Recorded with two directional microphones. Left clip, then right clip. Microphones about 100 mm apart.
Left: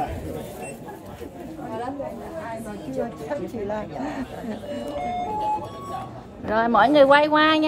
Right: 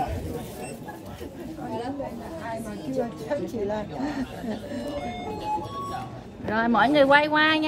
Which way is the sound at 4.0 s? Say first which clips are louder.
Left 1 dB; 5° right (ahead or behind).